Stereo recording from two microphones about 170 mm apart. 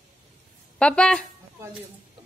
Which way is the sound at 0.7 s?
5° left (ahead or behind).